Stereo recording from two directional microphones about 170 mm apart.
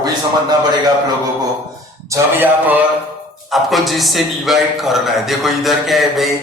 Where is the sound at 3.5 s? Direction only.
Centre (ahead or behind).